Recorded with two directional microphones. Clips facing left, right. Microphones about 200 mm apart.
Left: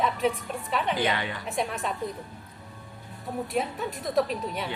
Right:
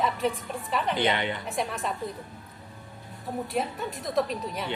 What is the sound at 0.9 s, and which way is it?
Speech, 25° right (ahead or behind).